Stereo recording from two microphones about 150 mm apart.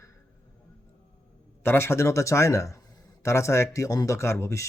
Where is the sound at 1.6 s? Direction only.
15° left (ahead or behind).